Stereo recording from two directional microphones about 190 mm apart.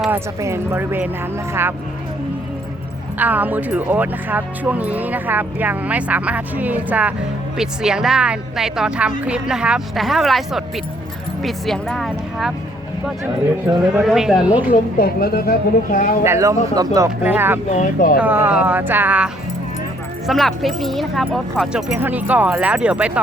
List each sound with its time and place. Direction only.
0.0 s speech: 10° right (ahead or behind)
3.2 s speech: 10° right (ahead or behind)
13.9 s speech: centre (ahead or behind)
14.9 s a woman's voice: 55° left (ahead or behind)
16.2 s speech: 15° right (ahead or behind)
17.7 s speech: 40° left (ahead or behind)
18.2 s speech: 10° right (ahead or behind)